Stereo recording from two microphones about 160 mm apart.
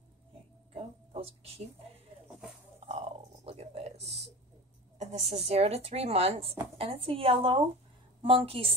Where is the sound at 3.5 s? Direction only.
40° right (ahead or behind).